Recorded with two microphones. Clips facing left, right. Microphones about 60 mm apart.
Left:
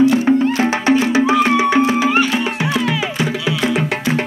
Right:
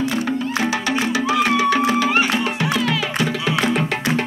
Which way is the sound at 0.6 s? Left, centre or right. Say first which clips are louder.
Left 6 dB; left.